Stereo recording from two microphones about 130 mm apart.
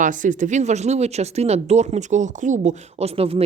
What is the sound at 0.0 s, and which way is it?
Speech, 80° right.